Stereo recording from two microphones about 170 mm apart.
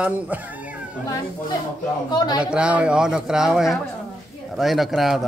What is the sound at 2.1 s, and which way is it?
Speech, 25° left (ahead or behind).